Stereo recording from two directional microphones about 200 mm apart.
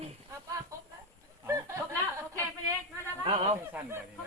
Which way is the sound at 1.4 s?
15° right (ahead or behind).